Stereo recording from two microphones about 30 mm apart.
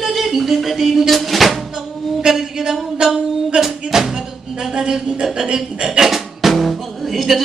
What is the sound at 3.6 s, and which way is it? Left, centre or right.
Music, centre.